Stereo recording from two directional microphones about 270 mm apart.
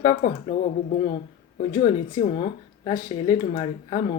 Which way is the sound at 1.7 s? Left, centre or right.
Centre.